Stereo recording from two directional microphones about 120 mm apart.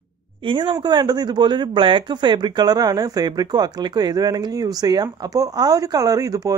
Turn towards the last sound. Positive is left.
turn(degrees=-30)  # may be behind; listen again after turning